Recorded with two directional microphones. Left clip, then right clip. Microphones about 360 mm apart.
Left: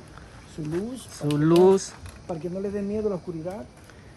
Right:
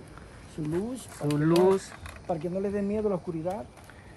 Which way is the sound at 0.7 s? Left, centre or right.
Centre.